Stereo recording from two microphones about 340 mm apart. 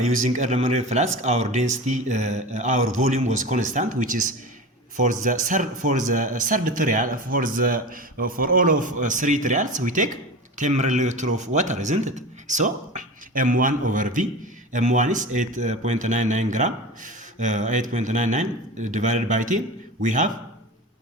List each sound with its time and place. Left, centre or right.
0.3 s speech: centre